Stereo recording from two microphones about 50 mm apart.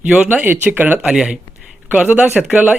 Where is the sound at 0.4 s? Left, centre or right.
Right.